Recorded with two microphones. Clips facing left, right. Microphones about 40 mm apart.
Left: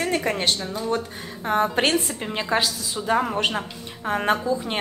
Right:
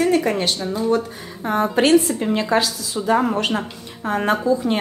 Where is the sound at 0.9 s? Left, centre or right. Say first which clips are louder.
Right 5 dB; left.